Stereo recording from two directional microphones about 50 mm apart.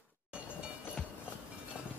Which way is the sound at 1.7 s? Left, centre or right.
Centre.